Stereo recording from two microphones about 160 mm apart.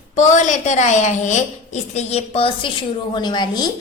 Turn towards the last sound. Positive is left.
turn(degrees=25)  # may be behind; listen again after turning